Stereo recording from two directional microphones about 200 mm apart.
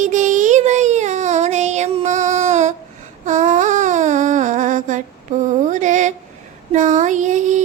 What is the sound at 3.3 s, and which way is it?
Humming, 35° right (ahead or behind).